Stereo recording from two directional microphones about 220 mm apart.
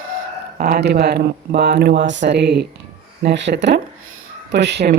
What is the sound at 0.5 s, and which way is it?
A woman's voice, 45° right (ahead or behind).